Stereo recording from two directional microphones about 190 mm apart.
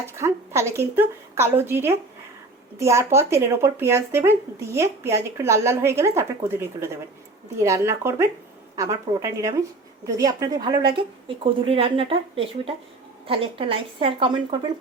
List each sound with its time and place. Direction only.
0.1 s speech: 15° right (ahead or behind)